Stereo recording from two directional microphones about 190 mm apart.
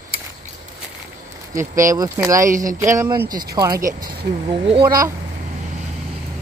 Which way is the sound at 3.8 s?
50° right (ahead or behind).